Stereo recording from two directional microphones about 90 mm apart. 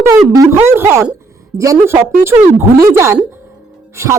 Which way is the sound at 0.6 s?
30° right (ahead or behind).